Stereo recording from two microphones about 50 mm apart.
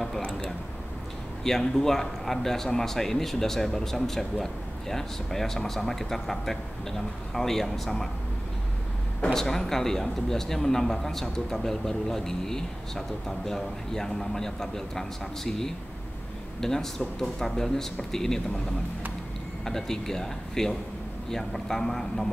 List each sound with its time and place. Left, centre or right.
0.2 s a sound: left
1.4 s speech: centre
9.3 s speech: centre
19.6 s speech: centre